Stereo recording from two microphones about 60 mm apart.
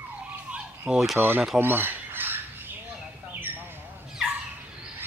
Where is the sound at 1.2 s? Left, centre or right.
Right.